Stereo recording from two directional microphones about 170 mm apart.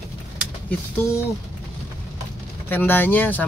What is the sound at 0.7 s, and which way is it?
Speech, 15° left (ahead or behind).